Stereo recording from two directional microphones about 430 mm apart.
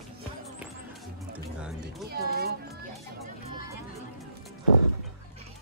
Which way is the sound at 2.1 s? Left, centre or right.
Right.